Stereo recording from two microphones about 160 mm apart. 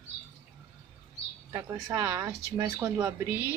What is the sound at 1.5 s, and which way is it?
Speech, 15° right (ahead or behind).